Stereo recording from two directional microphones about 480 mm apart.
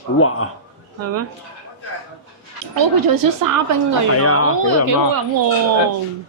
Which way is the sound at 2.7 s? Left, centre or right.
Right.